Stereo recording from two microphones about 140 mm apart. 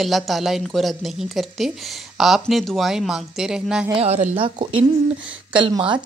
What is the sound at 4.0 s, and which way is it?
Speech, 50° right (ahead or behind).